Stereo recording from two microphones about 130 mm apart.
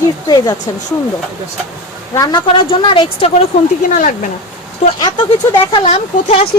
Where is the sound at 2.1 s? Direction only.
30° left (ahead or behind).